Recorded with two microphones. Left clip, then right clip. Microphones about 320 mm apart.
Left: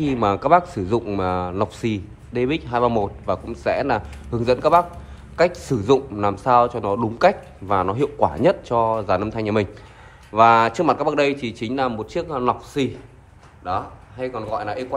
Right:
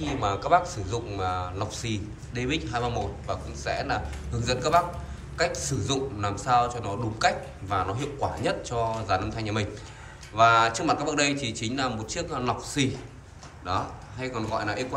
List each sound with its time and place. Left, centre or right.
0.0 s a man's voice: left; by 14.9 s centre